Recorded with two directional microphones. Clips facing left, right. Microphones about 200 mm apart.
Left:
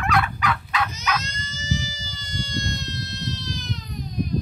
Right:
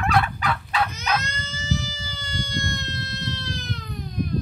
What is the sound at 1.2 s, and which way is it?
Goat, 60° right (ahead or behind).